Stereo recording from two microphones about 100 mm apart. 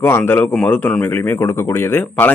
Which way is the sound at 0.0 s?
20° left (ahead or behind).